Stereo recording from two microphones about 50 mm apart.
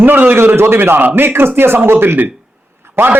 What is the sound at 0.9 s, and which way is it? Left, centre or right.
A man's voice, right.